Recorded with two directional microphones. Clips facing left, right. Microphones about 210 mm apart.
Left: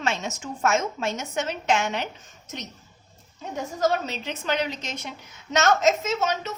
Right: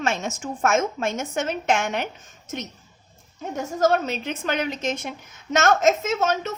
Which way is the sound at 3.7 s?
50° right (ahead or behind).